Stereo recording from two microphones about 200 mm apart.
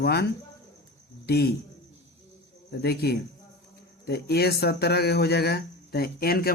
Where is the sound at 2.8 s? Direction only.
55° left (ahead or behind).